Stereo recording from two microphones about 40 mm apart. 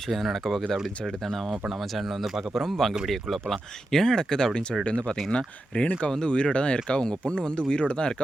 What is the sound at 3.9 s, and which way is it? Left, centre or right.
Speech, centre.